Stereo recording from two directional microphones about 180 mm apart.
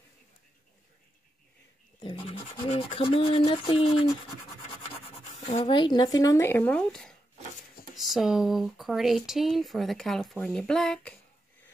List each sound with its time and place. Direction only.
2.0 s speech: 25° left (ahead or behind)
3.4 s a sound: 30° left (ahead or behind)
5.4 s speech: 40° left (ahead or behind)
5.7 s speech: 25° left (ahead or behind); by 11.1 s 5° left (ahead or behind)